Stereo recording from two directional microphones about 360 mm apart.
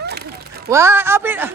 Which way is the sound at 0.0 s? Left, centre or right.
Right.